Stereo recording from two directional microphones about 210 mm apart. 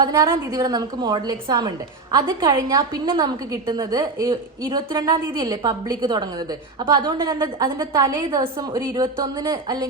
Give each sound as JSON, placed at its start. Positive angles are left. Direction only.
{"t": 0.0, "sound": "a woman's voice", "side_deg": -15}